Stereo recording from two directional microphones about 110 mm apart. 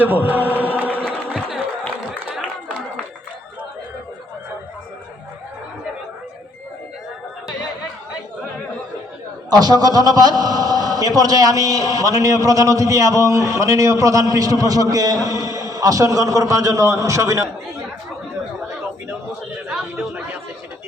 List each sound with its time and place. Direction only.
0.0 s chant: 15° right (ahead or behind)
9.5 s a man's voice: 35° right (ahead or behind)